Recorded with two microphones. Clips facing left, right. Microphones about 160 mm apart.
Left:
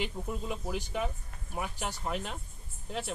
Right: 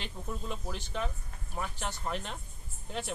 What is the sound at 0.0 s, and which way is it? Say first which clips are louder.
Speech: left 4 dB; 10° left (ahead or behind).